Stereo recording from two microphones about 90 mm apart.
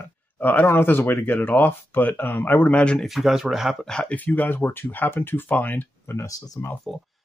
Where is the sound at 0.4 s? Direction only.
20° left (ahead or behind).